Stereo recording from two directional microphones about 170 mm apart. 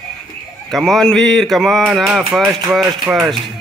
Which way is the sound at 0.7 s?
Centre (ahead or behind).